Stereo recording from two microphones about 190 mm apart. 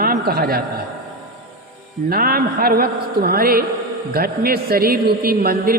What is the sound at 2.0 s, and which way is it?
A man's voice, 50° right (ahead or behind).